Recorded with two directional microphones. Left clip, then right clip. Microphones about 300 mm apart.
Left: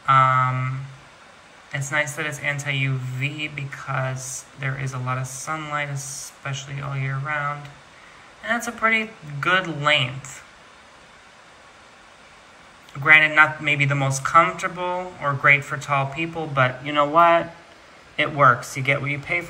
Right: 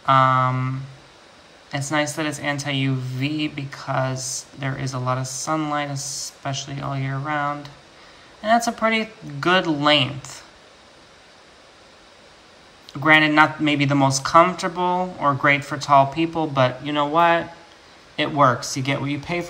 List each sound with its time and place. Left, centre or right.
0.0 s a man's voice: centre
4.2 s speech: centre
4.6 s a man's voice: centre
5.9 s speech: centre
6.4 s a man's voice: centre
13.0 s a man's voice: centre